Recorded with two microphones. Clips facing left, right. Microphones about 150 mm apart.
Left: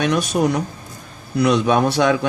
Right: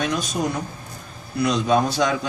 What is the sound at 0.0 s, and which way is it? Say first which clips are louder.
Speech: left 6 dB; 70° left (ahead or behind).